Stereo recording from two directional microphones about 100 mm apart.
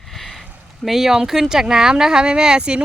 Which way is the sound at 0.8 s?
Centre (ahead or behind).